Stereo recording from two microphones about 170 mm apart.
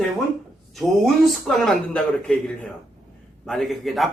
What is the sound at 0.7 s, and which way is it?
Speech, centre (ahead or behind).